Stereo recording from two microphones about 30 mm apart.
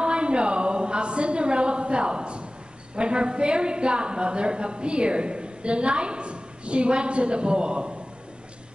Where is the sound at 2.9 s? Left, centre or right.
Right.